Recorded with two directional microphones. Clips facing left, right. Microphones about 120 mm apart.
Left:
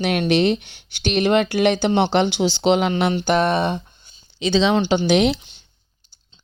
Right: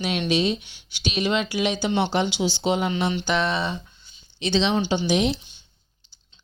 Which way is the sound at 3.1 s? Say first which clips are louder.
Left 6 dB; 45° left (ahead or behind).